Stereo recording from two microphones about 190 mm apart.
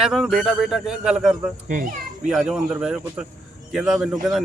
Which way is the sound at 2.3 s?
Centre (ahead or behind).